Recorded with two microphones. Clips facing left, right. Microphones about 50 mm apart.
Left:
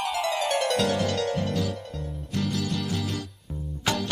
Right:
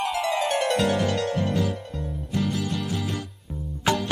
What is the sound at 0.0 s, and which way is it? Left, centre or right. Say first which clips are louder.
Music: right 2 dB; centre.